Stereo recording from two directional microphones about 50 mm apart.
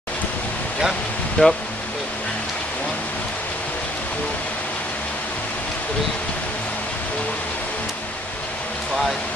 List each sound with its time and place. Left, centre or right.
1.4 s speech: left